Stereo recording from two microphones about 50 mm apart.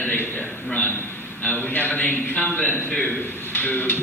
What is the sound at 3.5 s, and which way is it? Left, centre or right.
Speech, left.